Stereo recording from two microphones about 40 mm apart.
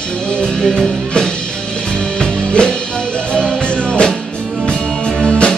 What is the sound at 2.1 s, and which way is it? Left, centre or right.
Music, centre.